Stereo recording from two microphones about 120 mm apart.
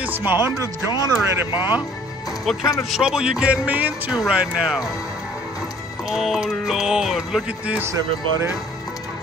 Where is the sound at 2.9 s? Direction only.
5° right (ahead or behind).